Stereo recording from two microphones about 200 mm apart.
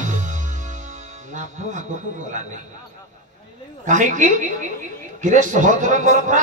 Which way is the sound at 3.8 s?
40° right (ahead or behind).